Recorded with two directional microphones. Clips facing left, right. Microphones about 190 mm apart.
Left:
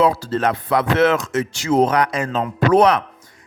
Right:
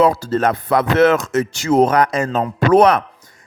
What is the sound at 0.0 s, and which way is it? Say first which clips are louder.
Speech: right 2 dB; 45° right (ahead or behind).